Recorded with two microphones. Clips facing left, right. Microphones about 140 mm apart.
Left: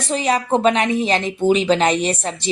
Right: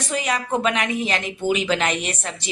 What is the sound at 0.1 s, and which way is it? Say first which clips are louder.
A woman's voice: left 6 dB; 30° left (ahead or behind).